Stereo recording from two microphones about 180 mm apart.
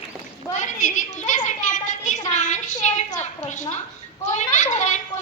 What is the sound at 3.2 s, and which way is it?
A woman's voice, 45° left (ahead or behind).